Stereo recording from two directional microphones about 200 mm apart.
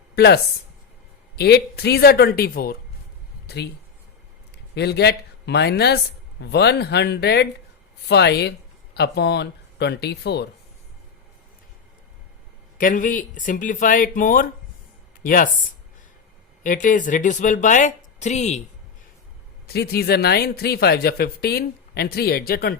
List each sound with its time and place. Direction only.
1.4 s speech: 55° left (ahead or behind)
4.7 s speech: 55° left (ahead or behind)
12.7 s speech: 40° left (ahead or behind)
16.6 s speech: 40° left (ahead or behind)
19.6 s speech: 55° left (ahead or behind)